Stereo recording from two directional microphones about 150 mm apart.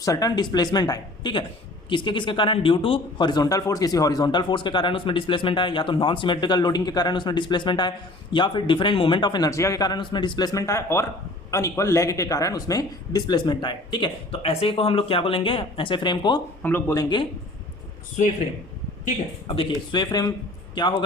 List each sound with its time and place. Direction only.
0.0 s speech: 25° left (ahead or behind)
19.5 s speech: 35° left (ahead or behind)